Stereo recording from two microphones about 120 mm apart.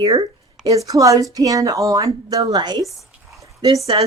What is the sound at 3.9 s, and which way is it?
Speech, 40° right (ahead or behind).